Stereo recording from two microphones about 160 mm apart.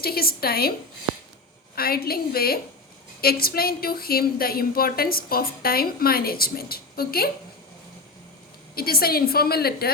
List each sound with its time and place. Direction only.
0.0 s speech: 70° left (ahead or behind)
1.7 s speech: 70° left (ahead or behind)
8.7 s speech: 70° left (ahead or behind)